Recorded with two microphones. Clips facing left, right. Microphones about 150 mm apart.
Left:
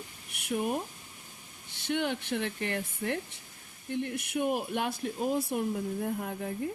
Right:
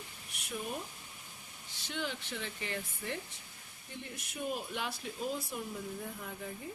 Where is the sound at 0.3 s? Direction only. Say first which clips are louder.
Left 9 dB; 60° left (ahead or behind).